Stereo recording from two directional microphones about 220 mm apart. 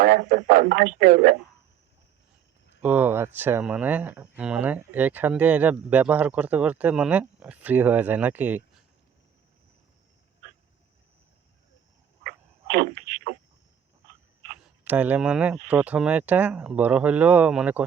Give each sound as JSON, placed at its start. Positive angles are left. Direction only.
{"t": 0.0, "sound": "speech", "side_deg": -40}
{"t": 2.8, "sound": "speech", "side_deg": -10}
{"t": 12.2, "sound": "a sound", "side_deg": -35}
{"t": 14.8, "sound": "speech", "side_deg": -5}